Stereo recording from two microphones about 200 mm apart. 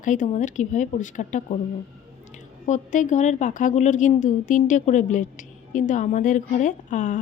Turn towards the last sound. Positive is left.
turn(degrees=40)  # may be behind; listen again after turning